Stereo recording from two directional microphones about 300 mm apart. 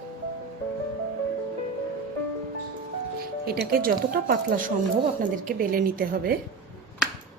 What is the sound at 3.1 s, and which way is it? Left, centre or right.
A woman's voice, right.